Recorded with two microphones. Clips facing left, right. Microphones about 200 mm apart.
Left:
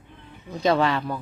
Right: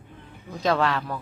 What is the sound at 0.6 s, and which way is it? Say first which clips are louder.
Speech: left 2 dB; centre (ahead or behind).